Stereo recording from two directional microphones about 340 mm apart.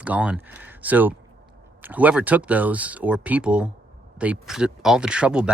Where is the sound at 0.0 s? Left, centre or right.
Centre.